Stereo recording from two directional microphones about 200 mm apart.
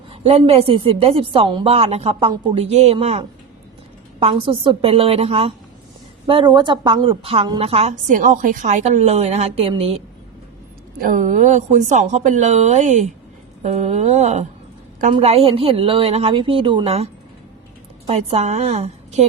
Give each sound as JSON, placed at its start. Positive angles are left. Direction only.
{"t": 0.1, "sound": "a woman's voice", "side_deg": -30}
{"t": 11.0, "sound": "a woman's voice", "side_deg": -40}